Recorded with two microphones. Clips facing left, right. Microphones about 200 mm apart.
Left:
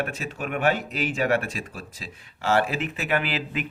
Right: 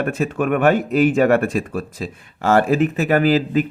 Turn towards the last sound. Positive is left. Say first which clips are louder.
# right 12 dB
turn(degrees=-40)  # may be behind; listen again after turning